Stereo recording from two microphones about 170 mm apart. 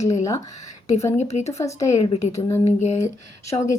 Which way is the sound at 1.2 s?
40° left (ahead or behind).